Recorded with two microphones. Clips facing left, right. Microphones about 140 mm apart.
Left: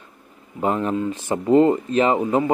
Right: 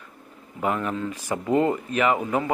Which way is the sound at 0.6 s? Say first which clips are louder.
Left 4 dB; 30° left (ahead or behind).